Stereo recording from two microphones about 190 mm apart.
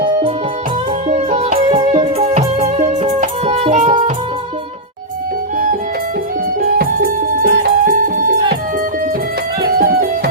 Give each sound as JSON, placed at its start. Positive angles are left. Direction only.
{"t": 0.0, "sound": "music", "side_deg": -30}
{"t": 6.7, "sound": "music", "side_deg": -50}
{"t": 9.7, "sound": "music", "side_deg": -50}